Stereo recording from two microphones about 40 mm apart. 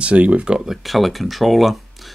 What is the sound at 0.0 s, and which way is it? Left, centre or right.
Speech, right.